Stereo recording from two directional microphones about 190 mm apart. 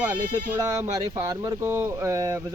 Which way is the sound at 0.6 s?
15° right (ahead or behind).